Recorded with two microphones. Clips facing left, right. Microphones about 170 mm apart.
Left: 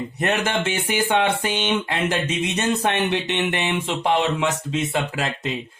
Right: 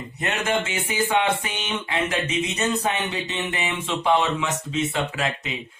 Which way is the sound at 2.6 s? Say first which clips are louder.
Left 5 dB; 75° left (ahead or behind).